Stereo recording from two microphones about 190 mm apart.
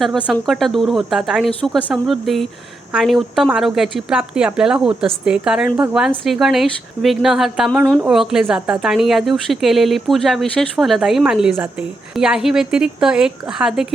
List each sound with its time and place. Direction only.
0.0 s a woman's voice: centre (ahead or behind)